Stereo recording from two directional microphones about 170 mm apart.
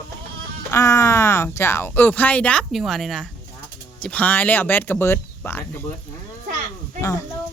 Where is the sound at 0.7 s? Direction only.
15° left (ahead or behind).